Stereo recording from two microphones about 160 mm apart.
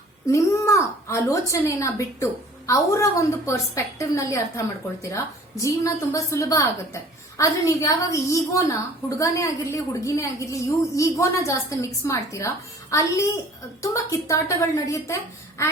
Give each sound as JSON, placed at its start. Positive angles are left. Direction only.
{"t": 0.3, "sound": "a woman's voice", "side_deg": 20}